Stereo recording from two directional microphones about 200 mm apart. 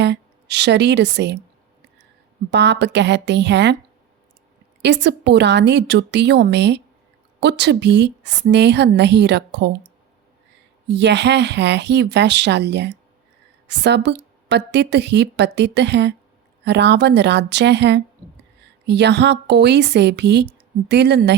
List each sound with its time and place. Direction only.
0.0 s a woman's voice: 60° right (ahead or behind)
2.5 s a woman's voice: 60° right (ahead or behind)
4.8 s a woman's voice: 60° right (ahead or behind)
10.8 s a woman's voice: 60° right (ahead or behind)